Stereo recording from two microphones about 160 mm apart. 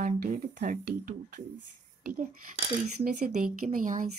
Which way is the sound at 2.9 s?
50° right (ahead or behind).